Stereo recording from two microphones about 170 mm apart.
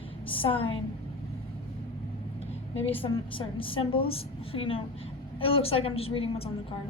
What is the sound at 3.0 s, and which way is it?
A woman's voice, 30° left (ahead or behind).